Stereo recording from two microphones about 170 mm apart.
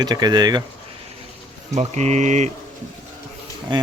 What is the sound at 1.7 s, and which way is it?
Speech, 40° right (ahead or behind).